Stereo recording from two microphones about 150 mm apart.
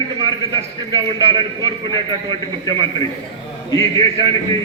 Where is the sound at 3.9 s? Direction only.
35° right (ahead or behind).